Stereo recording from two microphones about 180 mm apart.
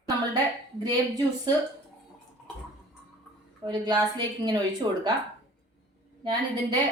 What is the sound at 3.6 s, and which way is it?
A woman's voice, 25° right (ahead or behind).